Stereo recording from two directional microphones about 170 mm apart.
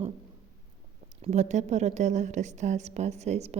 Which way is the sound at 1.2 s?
45° right (ahead or behind).